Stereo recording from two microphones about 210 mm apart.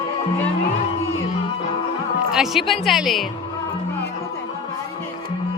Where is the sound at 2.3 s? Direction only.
Centre (ahead or behind).